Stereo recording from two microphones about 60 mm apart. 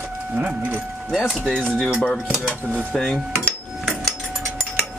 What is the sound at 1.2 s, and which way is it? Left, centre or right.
Speech, centre.